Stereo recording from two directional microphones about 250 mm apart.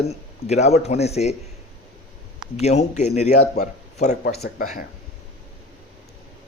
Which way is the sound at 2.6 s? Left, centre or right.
Left.